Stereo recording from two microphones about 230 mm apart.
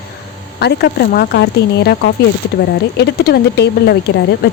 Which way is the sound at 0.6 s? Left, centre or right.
Left.